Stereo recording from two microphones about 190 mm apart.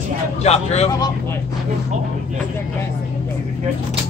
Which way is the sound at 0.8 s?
20° left (ahead or behind).